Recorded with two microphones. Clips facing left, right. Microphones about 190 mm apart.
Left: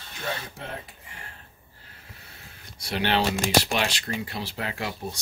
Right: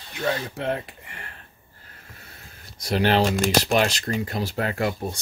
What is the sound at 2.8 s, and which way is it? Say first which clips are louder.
Speech: right 5 dB; 40° right (ahead or behind).